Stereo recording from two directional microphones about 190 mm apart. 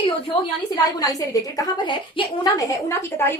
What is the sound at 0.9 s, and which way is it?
A woman's voice, 20° left (ahead or behind).